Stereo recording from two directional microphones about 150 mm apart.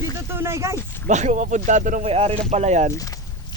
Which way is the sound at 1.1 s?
50° right (ahead or behind).